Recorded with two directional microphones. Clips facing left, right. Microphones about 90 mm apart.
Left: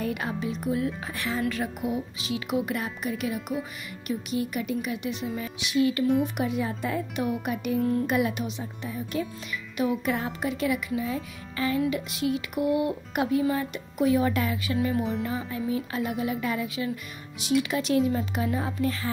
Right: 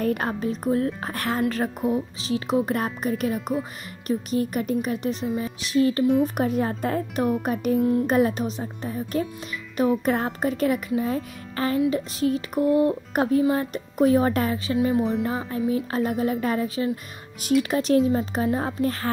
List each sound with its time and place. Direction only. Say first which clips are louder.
0.0 s speech: right 5 dB; 45° right (ahead or behind)
1.5 s speech: right 5 dB; 40° right (ahead or behind)